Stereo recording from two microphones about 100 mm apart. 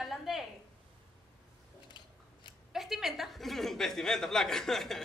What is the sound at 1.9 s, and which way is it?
Biting, 50° left (ahead or behind).